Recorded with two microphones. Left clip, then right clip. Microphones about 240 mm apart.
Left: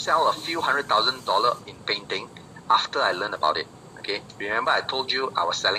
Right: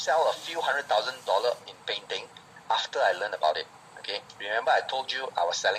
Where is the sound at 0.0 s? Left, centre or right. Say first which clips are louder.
Left 3 dB; centre.